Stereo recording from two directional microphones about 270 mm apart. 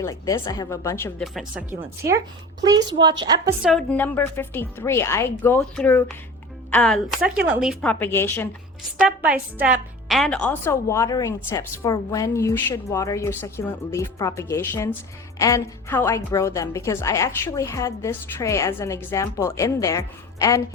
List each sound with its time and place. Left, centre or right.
0.0 s a woman's voice: centre
2.6 s a woman's voice: centre
3.6 s a woman's voice: centre
9.0 s a woman's voice: centre